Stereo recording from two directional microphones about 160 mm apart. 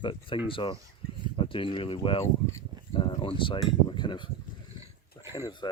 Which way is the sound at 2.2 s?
20° left (ahead or behind).